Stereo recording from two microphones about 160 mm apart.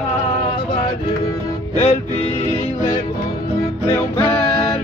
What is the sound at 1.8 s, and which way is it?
Music, 40° left (ahead or behind).